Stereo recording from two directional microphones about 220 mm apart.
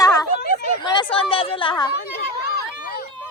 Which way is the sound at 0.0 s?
15° left (ahead or behind).